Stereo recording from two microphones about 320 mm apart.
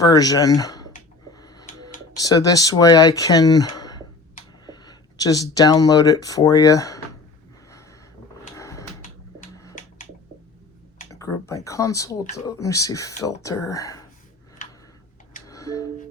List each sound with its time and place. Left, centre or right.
0.0 s speech: centre
1.3 s a sound: centre
2.2 s speech: centre
8.5 s a sound: centre
11.1 s speech: centre
14.6 s tick-tock: left
15.4 s music: centre